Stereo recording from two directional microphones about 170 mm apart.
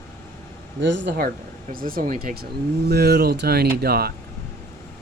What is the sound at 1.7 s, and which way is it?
Speech, 55° right (ahead or behind).